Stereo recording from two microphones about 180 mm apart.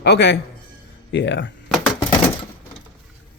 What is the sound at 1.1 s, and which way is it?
Speech, 80° left.